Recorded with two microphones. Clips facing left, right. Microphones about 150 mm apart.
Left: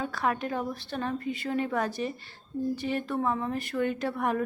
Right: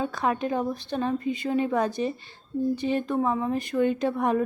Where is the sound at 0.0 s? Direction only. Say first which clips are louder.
Right 3 dB; 20° right (ahead or behind).